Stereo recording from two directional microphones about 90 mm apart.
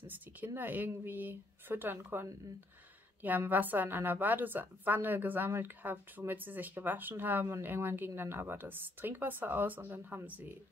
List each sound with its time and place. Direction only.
0.0 s a woman's voice: 20° right (ahead or behind)